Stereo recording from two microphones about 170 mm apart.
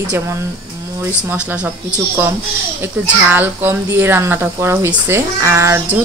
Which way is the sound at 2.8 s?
10° right (ahead or behind).